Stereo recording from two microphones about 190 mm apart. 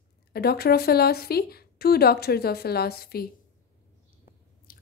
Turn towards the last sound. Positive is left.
turn(degrees=50)  # may be behind; listen again after turning